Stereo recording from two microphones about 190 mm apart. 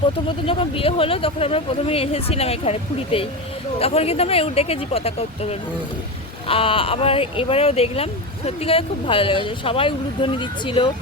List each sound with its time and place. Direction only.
0.3 s speech: 30° left (ahead or behind)